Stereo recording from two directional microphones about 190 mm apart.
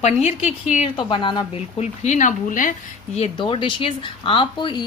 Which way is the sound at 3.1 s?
30° left (ahead or behind).